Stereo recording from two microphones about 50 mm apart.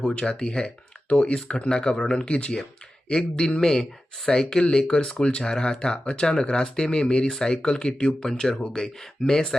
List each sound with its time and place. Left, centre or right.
0.0 s speech: left